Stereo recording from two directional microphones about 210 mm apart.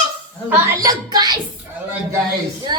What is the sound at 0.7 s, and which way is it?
Speech, 15° right (ahead or behind).